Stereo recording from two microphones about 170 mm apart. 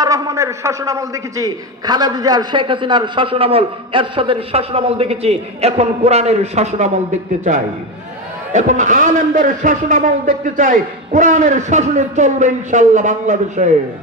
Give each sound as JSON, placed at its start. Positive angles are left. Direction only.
{"t": 0.0, "sound": "a man's voice", "side_deg": -20}